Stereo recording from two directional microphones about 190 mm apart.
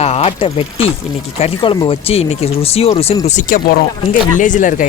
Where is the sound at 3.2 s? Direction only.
40° left (ahead or behind).